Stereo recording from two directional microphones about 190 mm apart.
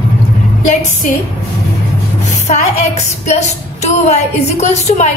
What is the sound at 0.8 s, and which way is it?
Speech, 40° left (ahead or behind).